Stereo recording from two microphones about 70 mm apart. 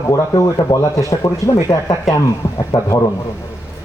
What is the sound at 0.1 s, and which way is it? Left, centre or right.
A man's voice, left.